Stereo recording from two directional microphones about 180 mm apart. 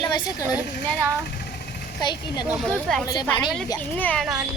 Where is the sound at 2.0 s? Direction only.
25° left (ahead or behind).